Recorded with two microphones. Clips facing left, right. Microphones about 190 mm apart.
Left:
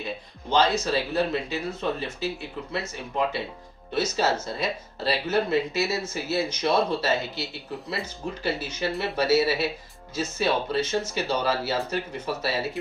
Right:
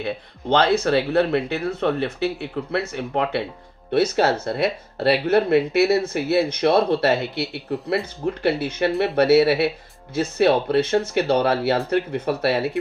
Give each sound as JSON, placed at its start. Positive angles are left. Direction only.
{"t": 0.5, "sound": "speech", "side_deg": -60}